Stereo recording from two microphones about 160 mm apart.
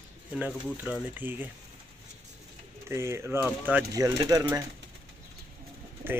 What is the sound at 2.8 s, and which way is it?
Speech, 15° right (ahead or behind).